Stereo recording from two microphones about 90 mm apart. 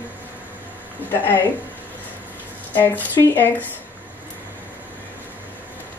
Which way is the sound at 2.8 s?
20° left (ahead or behind).